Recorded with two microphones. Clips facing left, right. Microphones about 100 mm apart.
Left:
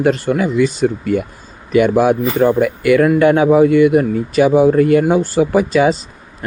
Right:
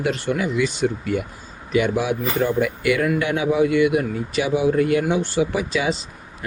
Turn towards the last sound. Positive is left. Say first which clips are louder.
# left 10 dB
turn(degrees=45)  # may be behind; listen again after turning